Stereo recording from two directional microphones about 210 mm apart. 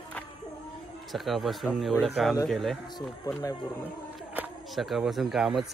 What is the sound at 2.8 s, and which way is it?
Speech, 20° left (ahead or behind).